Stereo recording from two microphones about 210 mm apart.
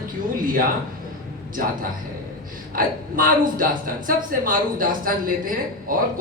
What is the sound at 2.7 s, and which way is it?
A woman's voice, 40° right (ahead or behind).